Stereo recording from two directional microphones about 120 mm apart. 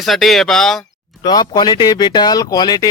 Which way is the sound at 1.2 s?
35° left (ahead or behind).